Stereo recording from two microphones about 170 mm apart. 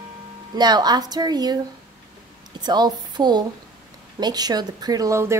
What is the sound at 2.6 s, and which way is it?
A woman's voice, 25° right (ahead or behind).